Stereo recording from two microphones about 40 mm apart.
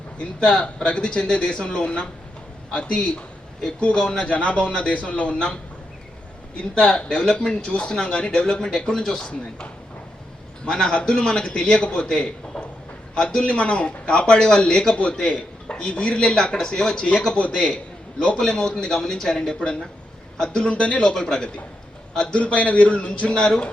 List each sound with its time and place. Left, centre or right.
0.2 s a man's voice: left
6.7 s a man's voice: left
10.7 s a man's voice: left
16.2 s a man's voice: centre
18.3 s a man's voice: centre
20.7 s a man's voice: left
21.0 s a man's voice: centre
22.4 s a man's voice: left
23.3 s speech: centre